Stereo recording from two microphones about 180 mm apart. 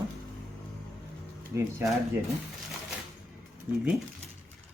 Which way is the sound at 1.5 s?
15° right (ahead or behind).